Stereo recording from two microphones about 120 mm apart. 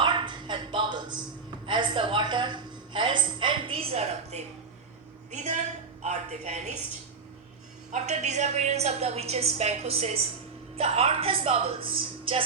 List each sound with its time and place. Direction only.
0.0 s a sound: 40° right (ahead or behind)
1.6 s music: 40° right (ahead or behind); by 4.4 s 65° right (ahead or behind)
5.3 s a woman's voice: 80° right
7.9 s a woman's voice: 80° right; by 12.4 s 50° right (ahead or behind)